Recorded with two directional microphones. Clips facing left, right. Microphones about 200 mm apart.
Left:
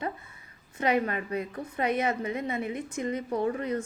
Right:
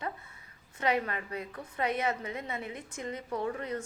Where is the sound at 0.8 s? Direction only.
15° left (ahead or behind).